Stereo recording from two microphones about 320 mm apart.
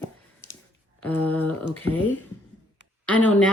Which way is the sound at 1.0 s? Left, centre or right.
Centre.